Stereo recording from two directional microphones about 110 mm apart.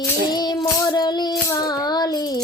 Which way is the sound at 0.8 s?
40° left (ahead or behind).